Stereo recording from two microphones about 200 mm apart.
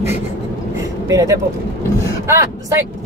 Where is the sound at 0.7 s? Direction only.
15° right (ahead or behind).